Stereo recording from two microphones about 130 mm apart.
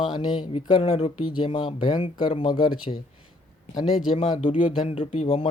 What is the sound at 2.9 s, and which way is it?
Speech, 50° left (ahead or behind).